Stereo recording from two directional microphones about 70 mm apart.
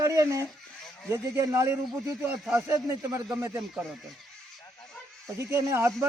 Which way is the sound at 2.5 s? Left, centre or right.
Right.